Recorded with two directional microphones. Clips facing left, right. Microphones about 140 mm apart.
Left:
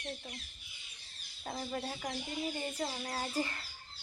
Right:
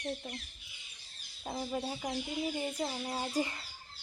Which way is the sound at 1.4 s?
10° right (ahead or behind).